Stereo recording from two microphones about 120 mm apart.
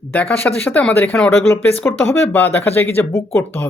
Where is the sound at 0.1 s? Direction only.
15° left (ahead or behind).